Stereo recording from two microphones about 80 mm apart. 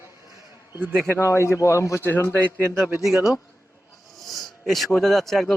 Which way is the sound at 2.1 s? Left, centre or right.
Left.